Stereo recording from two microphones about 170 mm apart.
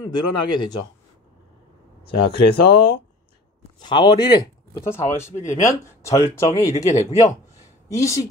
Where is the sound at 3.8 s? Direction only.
25° left (ahead or behind).